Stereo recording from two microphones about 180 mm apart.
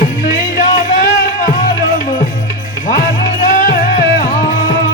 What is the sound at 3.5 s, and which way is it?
Music, 50° left (ahead or behind).